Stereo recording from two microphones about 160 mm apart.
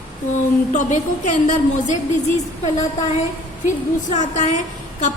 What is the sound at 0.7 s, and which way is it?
A woman's voice, 50° left (ahead or behind).